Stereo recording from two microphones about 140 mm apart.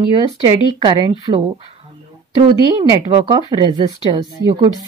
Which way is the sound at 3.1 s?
35° right (ahead or behind).